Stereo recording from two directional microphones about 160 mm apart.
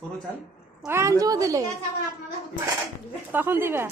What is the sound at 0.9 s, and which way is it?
Speech, 15° right (ahead or behind).